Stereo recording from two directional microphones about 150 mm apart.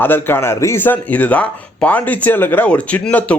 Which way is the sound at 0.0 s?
15° left (ahead or behind).